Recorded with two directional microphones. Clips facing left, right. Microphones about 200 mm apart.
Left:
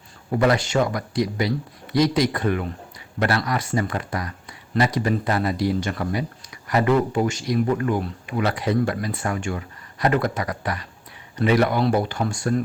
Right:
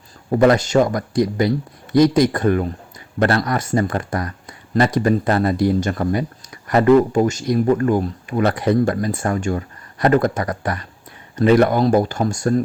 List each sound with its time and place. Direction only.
0.3 s speech: 45° right (ahead or behind)